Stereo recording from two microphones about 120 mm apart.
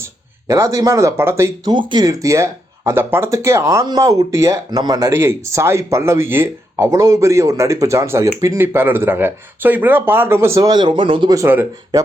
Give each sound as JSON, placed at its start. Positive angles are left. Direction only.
{"t": 0.0, "sound": "speech", "side_deg": -25}
{"t": 1.6, "sound": "speech", "side_deg": -40}
{"t": 11.3, "sound": "speech", "side_deg": -20}